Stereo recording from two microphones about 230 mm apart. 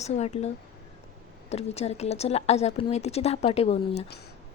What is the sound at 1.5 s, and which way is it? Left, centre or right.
Speech, left.